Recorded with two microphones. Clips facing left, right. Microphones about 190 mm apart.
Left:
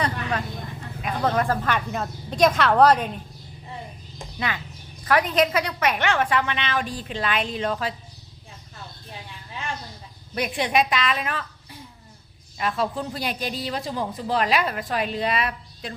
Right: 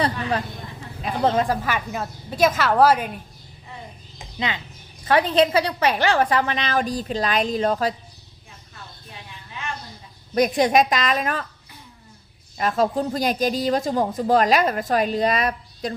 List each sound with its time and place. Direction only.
0.0 s a sound: 30° right (ahead or behind)
1.0 s speech: 25° right (ahead or behind)
1.5 s a woman's voice: 5° right (ahead or behind)
4.4 s a woman's voice: 20° right (ahead or behind); by 7.9 s 40° right (ahead or behind)
10.3 s speech: 40° right (ahead or behind)
12.5 s speech: 40° right (ahead or behind)